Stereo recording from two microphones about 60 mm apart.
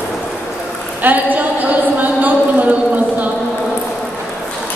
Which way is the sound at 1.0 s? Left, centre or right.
Right.